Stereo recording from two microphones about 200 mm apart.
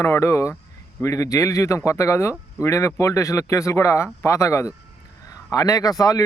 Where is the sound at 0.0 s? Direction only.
15° left (ahead or behind).